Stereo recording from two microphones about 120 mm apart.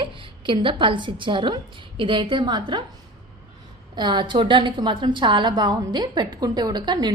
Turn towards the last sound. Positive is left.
turn(degrees=-35)  # may be behind; listen again after turning